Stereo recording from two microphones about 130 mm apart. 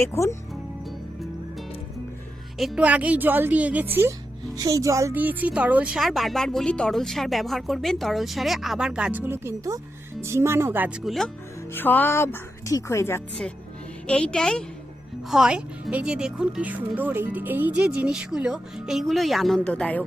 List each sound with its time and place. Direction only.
0.0 s speech: 20° left (ahead or behind)
2.6 s a woman's voice: 5° right (ahead or behind)
4.5 s speech: 25° right (ahead or behind)
5.1 s speech: 15° right (ahead or behind)
11.0 s speech: centre (ahead or behind)
11.7 s speech: 15° left (ahead or behind)
14.1 s a woman's voice: 5° left (ahead or behind)
15.3 s speech: 5° right (ahead or behind); by 20.1 s 10° left (ahead or behind)